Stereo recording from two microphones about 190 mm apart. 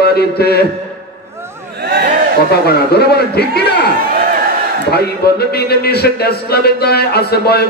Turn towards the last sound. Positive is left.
turn(degrees=55)  # may be behind; listen again after turning